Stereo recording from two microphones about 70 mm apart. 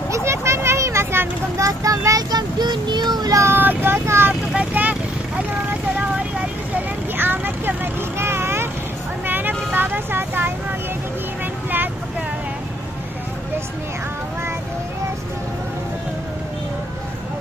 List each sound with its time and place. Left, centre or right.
0.1 s a sound: right
1.6 s child singing: right
3.5 s vehicle: right
4.6 s vehicle: right
7.2 s vehicle: right